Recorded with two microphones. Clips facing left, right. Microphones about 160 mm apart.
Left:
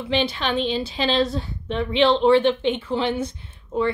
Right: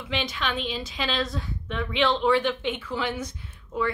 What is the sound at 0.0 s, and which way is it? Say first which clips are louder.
Speech: left 7 dB; 30° left (ahead or behind).